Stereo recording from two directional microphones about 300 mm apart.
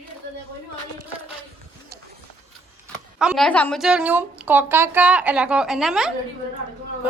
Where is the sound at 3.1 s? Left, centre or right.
Centre.